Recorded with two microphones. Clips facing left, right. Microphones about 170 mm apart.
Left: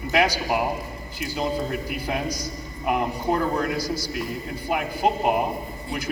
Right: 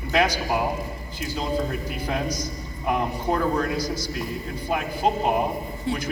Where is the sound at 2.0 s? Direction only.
10° left (ahead or behind).